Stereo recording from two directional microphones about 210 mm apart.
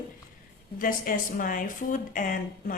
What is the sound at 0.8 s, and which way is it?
A woman's voice, 40° left (ahead or behind).